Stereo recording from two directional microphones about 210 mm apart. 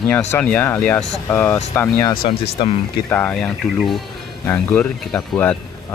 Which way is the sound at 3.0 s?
10° left (ahead or behind).